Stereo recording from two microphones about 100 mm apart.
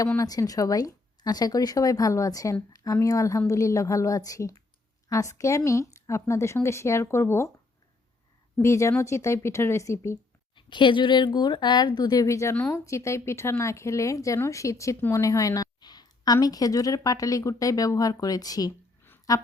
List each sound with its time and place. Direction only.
0.2 s a woman's voice: 35° left (ahead or behind)
8.5 s speech: 30° left (ahead or behind)
10.5 s a woman's voice: 50° left (ahead or behind); by 19.4 s 35° left (ahead or behind)